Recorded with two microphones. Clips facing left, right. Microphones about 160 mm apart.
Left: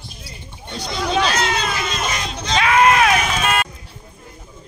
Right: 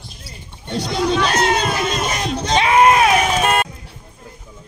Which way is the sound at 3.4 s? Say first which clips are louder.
Right 3 dB; 45° right (ahead or behind).